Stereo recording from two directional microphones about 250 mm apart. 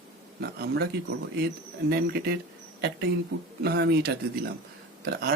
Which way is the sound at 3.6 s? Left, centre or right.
Right.